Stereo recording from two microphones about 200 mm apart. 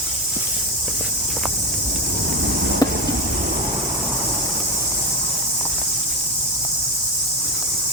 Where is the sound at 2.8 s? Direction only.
20° left (ahead or behind).